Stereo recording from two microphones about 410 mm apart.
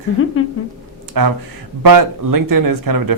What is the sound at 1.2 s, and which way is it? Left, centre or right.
Speech, right.